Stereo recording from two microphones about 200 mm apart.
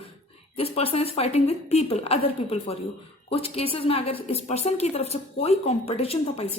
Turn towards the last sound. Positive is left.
turn(degrees=30)  # may be behind; listen again after turning